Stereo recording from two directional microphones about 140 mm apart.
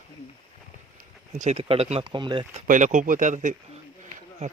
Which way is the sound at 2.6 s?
65° right (ahead or behind).